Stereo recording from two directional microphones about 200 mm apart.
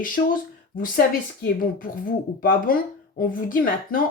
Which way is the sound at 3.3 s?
45° left (ahead or behind).